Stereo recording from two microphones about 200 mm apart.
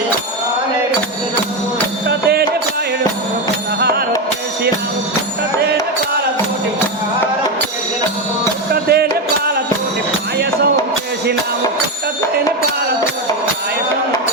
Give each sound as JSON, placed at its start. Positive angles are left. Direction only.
{"t": 2.0, "sound": "music", "side_deg": -55}
{"t": 3.8, "sound": "music", "side_deg": -55}
{"t": 8.7, "sound": "music", "side_deg": -55}